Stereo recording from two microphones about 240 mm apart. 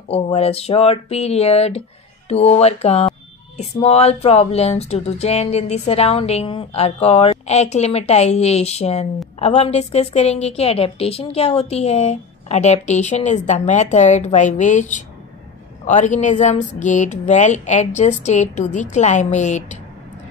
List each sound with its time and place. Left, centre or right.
0.1 s a woman's voice: left